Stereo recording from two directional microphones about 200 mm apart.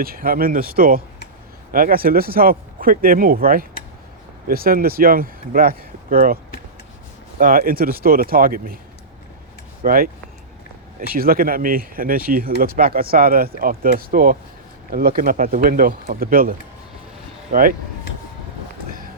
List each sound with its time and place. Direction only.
0.0 s speech: 45° right (ahead or behind)
9.8 s speech: 45° right (ahead or behind)